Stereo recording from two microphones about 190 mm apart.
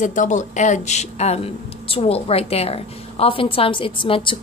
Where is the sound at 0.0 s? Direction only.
40° left (ahead or behind).